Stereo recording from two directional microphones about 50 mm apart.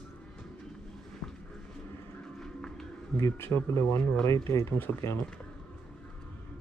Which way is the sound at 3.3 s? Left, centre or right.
Left.